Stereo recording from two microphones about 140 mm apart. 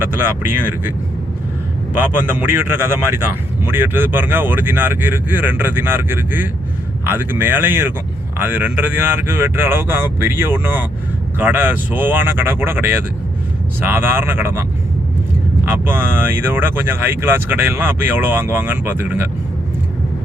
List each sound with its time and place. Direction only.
0.0 s speech: 15° right (ahead or behind)
15.7 s speech: 15° right (ahead or behind)